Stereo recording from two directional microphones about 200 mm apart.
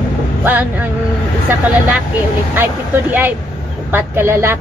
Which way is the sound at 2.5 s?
10° right (ahead or behind).